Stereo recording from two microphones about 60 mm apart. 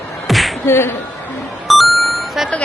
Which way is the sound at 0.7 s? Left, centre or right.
Left.